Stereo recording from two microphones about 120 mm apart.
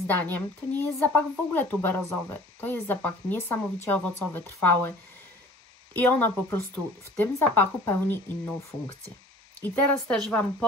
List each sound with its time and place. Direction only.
0.0 s speech: 15° left (ahead or behind)
5.9 s speech: 15° left (ahead or behind)
9.6 s speech: 15° left (ahead or behind)